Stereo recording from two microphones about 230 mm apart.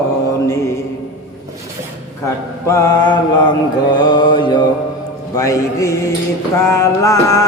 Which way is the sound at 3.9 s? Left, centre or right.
Centre.